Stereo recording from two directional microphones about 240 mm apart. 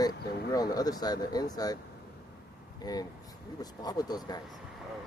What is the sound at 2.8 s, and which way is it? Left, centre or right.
Speech, centre.